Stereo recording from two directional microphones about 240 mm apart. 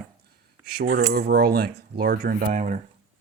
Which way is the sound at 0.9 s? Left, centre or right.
Right.